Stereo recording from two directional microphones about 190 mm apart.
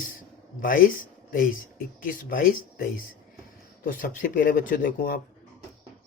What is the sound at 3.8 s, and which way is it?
Speech, 45° left (ahead or behind).